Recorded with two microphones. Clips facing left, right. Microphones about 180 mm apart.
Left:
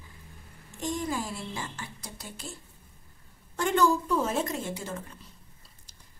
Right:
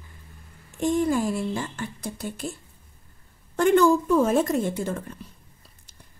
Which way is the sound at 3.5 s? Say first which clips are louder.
Right 7 dB; 55° right (ahead or behind).